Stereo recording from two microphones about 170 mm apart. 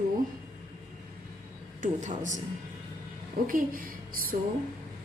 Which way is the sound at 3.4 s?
55° right (ahead or behind).